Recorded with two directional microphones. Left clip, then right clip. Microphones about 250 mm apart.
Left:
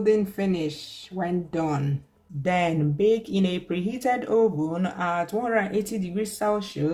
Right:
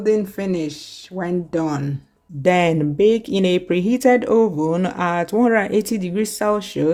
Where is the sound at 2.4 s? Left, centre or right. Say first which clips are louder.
Right 8 dB; right.